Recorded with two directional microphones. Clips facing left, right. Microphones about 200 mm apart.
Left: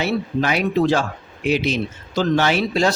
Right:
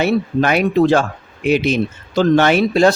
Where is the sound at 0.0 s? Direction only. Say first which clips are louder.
Right 5 dB; 55° right (ahead or behind).